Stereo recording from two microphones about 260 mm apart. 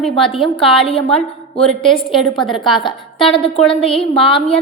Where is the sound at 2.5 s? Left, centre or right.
Centre.